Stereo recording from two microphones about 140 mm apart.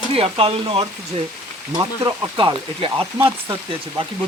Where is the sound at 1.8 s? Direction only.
25° right (ahead or behind).